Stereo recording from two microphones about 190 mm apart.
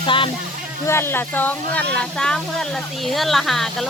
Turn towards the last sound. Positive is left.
turn(degrees=0)  # may be behind; listen again after turning